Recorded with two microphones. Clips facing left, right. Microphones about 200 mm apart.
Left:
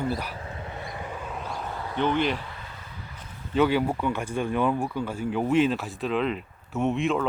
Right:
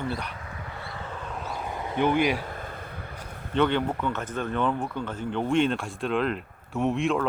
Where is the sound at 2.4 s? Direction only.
50° right (ahead or behind).